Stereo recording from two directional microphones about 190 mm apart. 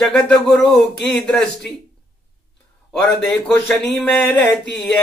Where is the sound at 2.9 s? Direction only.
5° left (ahead or behind).